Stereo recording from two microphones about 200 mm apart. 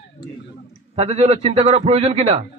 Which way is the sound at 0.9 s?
30° right (ahead or behind).